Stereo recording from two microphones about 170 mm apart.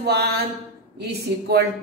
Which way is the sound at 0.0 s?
75° right (ahead or behind).